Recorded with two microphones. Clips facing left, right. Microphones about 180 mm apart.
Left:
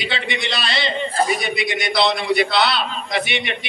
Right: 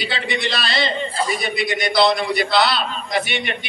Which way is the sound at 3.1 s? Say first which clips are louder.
Right 1 dB; 45° right (ahead or behind).